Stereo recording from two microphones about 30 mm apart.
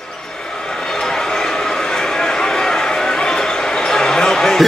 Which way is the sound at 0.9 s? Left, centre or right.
Centre.